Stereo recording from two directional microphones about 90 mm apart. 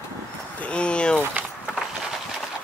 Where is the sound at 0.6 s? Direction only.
10° left (ahead or behind).